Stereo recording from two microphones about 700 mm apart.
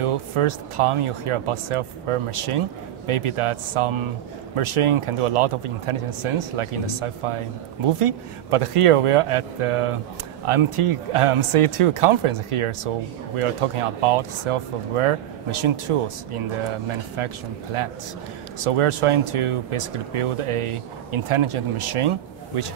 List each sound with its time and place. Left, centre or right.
0.0 s speech: right
18.6 s speech: right